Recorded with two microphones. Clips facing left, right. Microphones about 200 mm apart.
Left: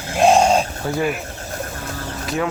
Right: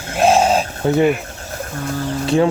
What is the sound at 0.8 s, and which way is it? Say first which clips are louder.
Speech: right 11 dB; 25° right (ahead or behind).